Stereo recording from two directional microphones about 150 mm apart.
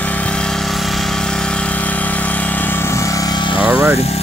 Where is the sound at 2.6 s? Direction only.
15° left (ahead or behind).